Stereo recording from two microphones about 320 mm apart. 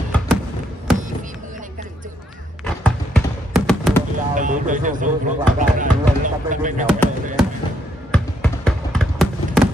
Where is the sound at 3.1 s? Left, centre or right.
Centre.